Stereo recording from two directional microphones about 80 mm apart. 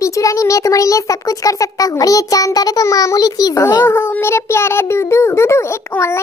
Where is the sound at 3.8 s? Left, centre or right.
Left.